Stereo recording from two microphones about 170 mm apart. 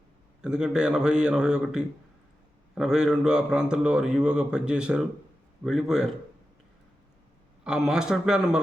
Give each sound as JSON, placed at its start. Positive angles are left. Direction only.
{"t": 0.4, "sound": "a man's voice", "side_deg": -5}
{"t": 7.6, "sound": "a man's voice", "side_deg": -5}